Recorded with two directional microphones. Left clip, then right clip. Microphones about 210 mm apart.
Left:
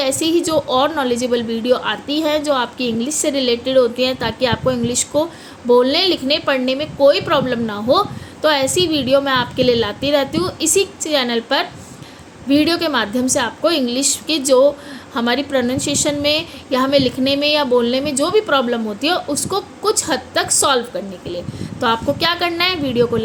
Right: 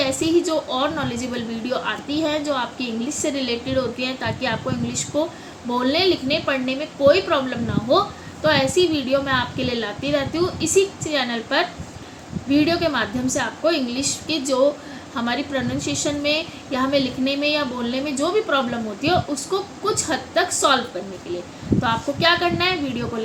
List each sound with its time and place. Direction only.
0.0 s a woman's voice: 55° left (ahead or behind)
21.8 s a woman's voice: 55° left (ahead or behind)